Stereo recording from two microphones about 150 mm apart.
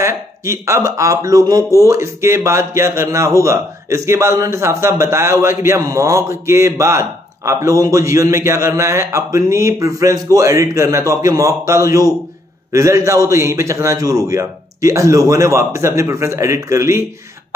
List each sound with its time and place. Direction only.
0.0 s speech: 20° right (ahead or behind)